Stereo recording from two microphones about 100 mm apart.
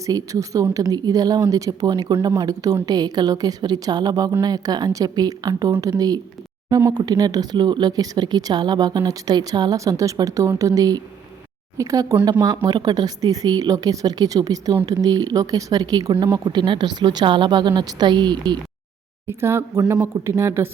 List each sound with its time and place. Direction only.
0.0 s a woman's voice: 35° right (ahead or behind); by 18.6 s 50° right (ahead or behind)
19.3 s speech: 25° right (ahead or behind)